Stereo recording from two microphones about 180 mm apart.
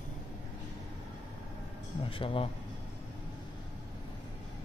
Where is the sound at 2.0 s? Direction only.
30° left (ahead or behind).